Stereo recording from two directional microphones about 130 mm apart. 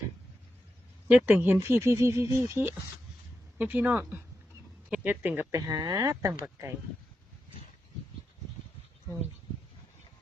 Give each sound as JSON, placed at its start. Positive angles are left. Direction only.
{"t": 1.0, "sound": "speech", "side_deg": -10}
{"t": 5.5, "sound": "speech", "side_deg": -30}